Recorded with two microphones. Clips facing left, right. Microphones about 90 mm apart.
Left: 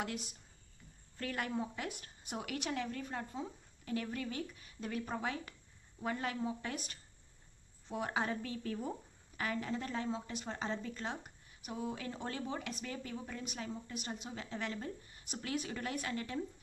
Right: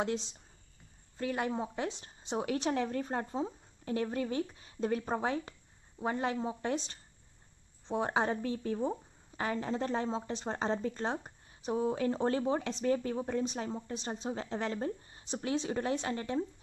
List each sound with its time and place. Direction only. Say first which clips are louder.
0.0 s a woman's voice: right 7 dB; 25° right (ahead or behind)